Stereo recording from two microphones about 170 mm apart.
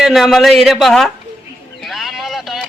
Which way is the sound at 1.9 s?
Centre (ahead or behind).